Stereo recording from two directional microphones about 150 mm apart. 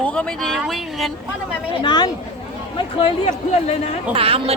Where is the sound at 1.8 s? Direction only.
30° left (ahead or behind).